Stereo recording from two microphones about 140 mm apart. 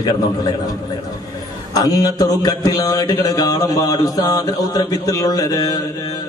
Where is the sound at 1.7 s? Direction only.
25° left (ahead or behind).